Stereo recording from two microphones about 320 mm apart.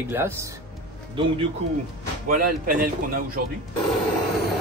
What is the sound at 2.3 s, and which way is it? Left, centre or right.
Speech, right.